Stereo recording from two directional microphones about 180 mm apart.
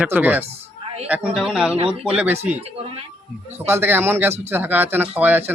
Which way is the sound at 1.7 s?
30° right (ahead or behind).